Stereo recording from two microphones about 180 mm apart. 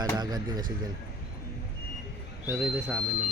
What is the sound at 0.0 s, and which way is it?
Speech, 20° right (ahead or behind).